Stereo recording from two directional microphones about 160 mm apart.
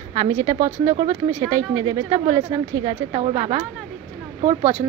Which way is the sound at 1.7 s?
30° right (ahead or behind).